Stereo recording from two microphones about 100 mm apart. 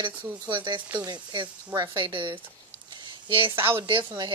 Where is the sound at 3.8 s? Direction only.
50° right (ahead or behind).